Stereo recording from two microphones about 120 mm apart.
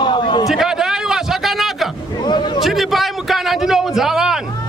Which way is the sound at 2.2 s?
40° left (ahead or behind).